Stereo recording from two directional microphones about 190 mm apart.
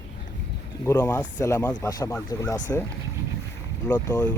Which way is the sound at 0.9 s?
15° left (ahead or behind).